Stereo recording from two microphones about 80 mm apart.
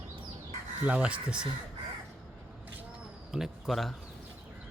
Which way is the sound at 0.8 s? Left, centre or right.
Centre.